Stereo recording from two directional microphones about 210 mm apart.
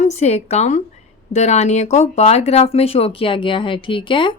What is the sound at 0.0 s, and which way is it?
A woman's voice, 30° left (ahead or behind).